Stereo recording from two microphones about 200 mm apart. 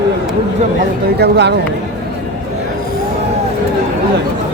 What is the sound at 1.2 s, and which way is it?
Speech, 60° right (ahead or behind).